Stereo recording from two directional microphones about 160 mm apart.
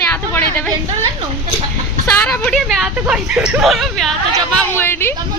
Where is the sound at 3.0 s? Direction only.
5° right (ahead or behind).